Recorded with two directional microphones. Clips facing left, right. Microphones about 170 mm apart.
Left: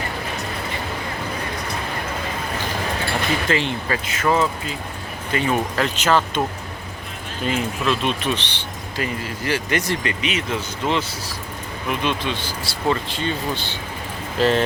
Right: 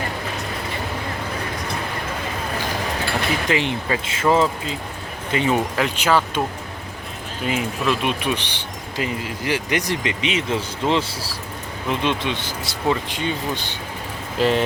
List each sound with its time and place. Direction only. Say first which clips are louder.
3.5 s speech: right 1 dB; 15° right (ahead or behind)
7.4 s speech: even; 10° right (ahead or behind)